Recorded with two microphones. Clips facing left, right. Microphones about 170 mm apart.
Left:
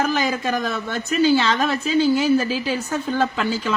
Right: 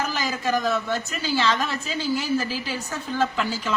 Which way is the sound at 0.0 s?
60° left (ahead or behind).